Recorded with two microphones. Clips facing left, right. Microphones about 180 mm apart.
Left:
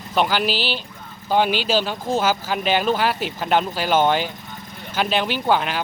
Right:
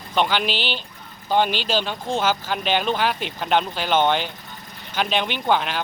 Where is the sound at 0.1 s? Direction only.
5° left (ahead or behind).